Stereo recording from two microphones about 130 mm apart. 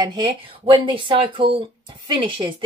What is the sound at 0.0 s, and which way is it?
Speech, 35° right (ahead or behind).